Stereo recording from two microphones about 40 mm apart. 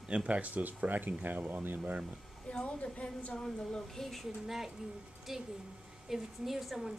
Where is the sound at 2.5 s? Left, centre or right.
Left; by 4.2 s centre.